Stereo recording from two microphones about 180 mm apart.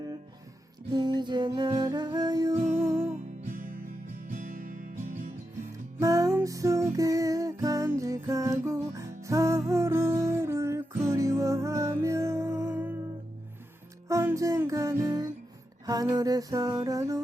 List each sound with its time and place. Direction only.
0.9 s music: 25° right (ahead or behind)
3.4 s music: 50° right (ahead or behind)
6.0 s music: 20° right (ahead or behind)
14.1 s music: 15° right (ahead or behind)